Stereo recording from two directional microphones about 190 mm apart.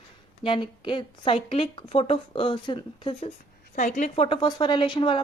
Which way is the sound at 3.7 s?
40° left (ahead or behind).